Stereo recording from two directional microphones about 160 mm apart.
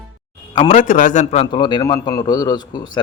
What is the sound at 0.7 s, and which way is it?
Speech, 55° left (ahead or behind).